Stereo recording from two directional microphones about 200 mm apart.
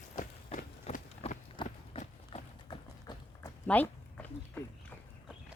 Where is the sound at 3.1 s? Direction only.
20° left (ahead or behind).